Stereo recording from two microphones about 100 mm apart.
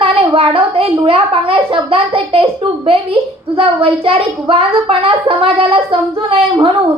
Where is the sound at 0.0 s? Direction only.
70° right (ahead or behind).